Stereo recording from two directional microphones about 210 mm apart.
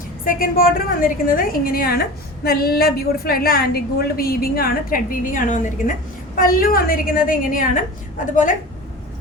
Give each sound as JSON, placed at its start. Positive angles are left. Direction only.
{"t": 0.3, "sound": "a woman's voice", "side_deg": 45}